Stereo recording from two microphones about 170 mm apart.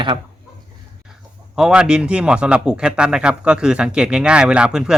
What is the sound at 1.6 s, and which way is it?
A man's voice, 5° right (ahead or behind).